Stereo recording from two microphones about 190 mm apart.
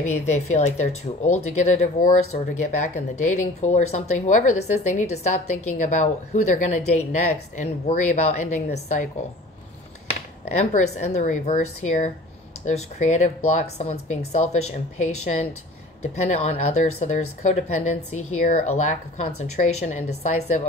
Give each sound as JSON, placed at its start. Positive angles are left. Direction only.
{"t": 0.0, "sound": "speech", "side_deg": 35}
{"t": 10.5, "sound": "speech", "side_deg": 35}